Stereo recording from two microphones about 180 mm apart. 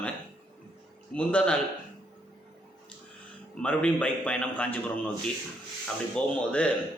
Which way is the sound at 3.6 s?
5° left (ahead or behind).